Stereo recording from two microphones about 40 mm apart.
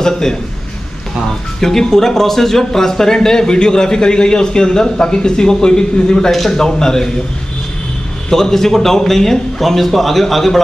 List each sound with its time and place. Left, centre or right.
0.0 s speech: centre
1.6 s speech: centre
6.3 s a man's voice: centre
8.3 s speech: centre